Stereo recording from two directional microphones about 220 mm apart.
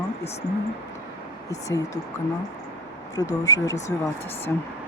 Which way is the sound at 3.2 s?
15° left (ahead or behind).